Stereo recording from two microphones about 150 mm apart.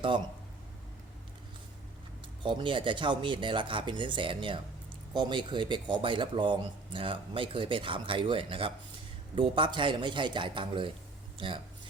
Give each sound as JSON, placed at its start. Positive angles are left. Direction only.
{"t": 2.4, "sound": "speech", "side_deg": -30}